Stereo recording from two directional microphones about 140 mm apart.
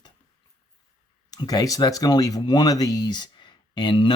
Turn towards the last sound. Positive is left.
turn(degrees=35)  # may be behind; listen again after turning